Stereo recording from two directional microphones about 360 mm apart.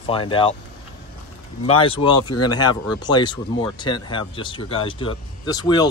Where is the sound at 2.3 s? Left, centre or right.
Left.